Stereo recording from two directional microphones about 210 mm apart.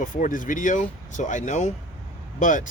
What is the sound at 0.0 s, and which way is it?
Speech, 40° left (ahead or behind).